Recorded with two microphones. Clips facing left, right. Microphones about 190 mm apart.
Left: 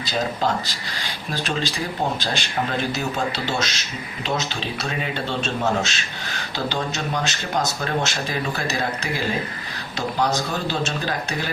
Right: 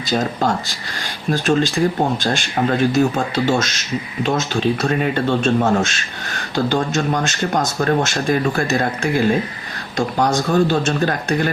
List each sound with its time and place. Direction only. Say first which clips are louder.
0.1 s speech: right 4 dB; 50° right (ahead or behind)